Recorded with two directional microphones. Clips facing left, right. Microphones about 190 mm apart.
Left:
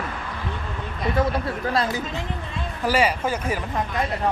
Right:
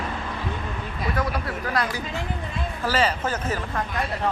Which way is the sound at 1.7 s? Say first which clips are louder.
Left 2 dB; 25° left (ahead or behind).